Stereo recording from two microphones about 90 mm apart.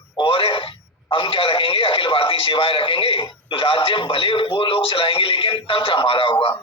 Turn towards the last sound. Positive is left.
turn(degrees=80)